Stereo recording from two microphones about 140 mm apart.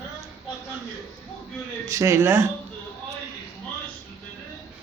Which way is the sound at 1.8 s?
25° right (ahead or behind).